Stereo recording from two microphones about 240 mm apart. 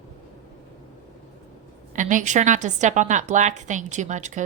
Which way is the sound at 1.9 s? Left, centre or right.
Right.